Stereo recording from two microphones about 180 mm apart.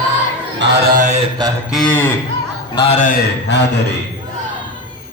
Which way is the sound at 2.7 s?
35° left (ahead or behind).